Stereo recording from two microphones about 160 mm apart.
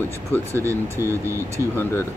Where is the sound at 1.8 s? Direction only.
15° left (ahead or behind).